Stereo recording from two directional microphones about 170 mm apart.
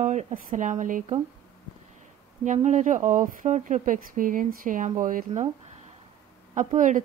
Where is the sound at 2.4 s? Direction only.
45° right (ahead or behind).